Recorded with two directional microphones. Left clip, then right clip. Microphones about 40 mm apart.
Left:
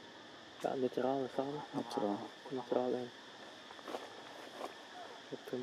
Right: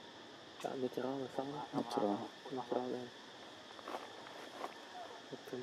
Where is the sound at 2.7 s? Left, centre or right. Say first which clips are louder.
Left 6 dB; left.